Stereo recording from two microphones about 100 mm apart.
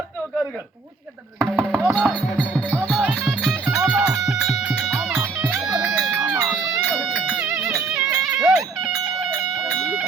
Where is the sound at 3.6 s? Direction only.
10° right (ahead or behind).